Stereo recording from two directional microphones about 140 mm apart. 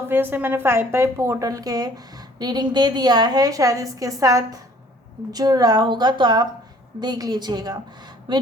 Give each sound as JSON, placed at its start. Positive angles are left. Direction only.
{"t": 0.1, "sound": "a woman's voice", "side_deg": -15}